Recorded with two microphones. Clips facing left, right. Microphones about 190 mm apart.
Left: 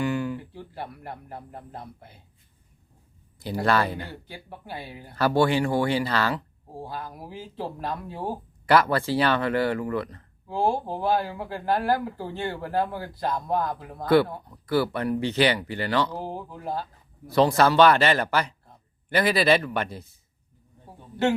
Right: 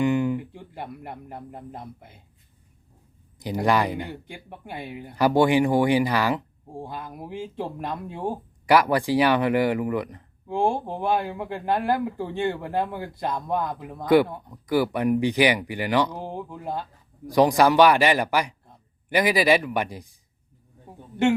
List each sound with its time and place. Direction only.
0.0 s speech: 20° right (ahead or behind)
3.3 s speech: 15° right (ahead or behind)